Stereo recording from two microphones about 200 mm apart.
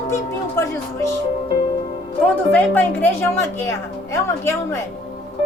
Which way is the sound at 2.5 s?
10° left (ahead or behind).